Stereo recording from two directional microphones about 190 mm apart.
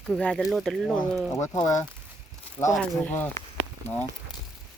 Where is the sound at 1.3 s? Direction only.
15° left (ahead or behind).